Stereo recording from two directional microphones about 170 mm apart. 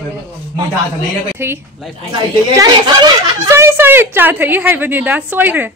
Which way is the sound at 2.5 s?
25° right (ahead or behind).